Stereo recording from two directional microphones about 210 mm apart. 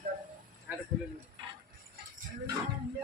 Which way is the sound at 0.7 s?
10° right (ahead or behind).